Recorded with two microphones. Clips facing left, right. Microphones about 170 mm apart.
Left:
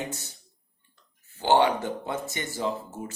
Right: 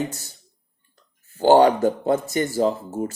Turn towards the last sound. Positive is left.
turn(degrees=-40)  # may be behind; listen again after turning